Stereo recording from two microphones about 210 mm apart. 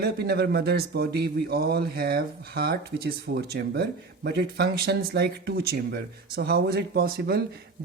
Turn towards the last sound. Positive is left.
turn(degrees=-45)  # may be behind; listen again after turning